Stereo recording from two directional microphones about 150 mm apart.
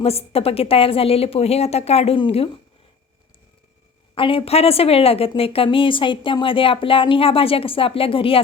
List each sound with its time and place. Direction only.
0.0 s a woman's voice: 40° left (ahead or behind)
4.1 s a woman's voice: 35° left (ahead or behind)